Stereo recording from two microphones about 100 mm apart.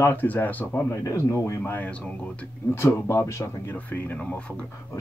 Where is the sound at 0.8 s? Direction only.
30° left (ahead or behind).